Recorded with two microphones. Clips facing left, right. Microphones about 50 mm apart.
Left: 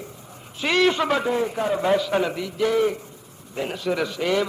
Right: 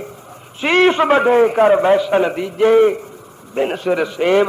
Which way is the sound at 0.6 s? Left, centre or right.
Right.